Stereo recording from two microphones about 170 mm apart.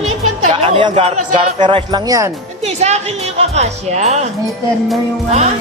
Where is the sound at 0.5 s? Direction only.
35° right (ahead or behind).